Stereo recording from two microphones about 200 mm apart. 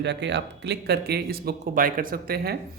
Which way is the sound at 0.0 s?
60° right (ahead or behind).